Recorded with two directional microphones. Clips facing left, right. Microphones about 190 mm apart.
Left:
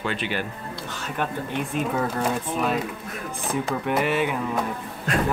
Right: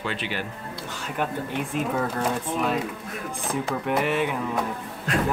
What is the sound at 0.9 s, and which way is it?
Speech, 10° right (ahead or behind).